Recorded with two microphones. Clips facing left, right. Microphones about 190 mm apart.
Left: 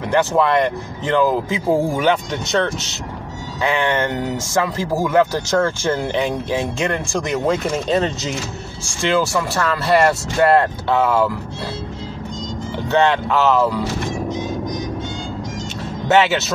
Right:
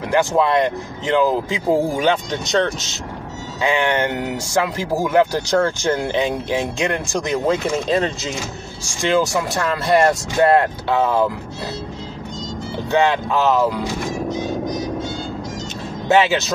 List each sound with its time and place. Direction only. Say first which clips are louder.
0.1 s speech: even; 15° right (ahead or behind)
3.6 s speech: even; 15° right (ahead or behind)
9.1 s speech: right 1 dB; 15° right (ahead or behind)
12.9 s speech: left 1 dB; 10° right (ahead or behind)
16.1 s speech: even; 15° right (ahead or behind)